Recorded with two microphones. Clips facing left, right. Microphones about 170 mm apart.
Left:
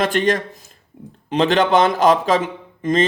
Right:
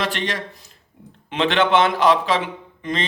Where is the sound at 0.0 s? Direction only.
45° left (ahead or behind).